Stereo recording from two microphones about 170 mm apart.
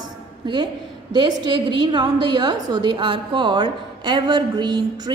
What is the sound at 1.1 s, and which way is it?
A woman's voice, 25° right (ahead or behind).